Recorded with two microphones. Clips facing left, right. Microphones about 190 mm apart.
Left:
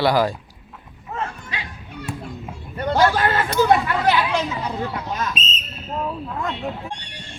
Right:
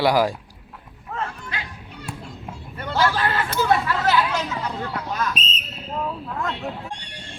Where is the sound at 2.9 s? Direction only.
45° left (ahead or behind).